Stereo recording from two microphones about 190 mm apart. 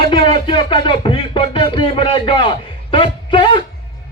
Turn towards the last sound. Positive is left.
turn(degrees=25)  # may be behind; listen again after turning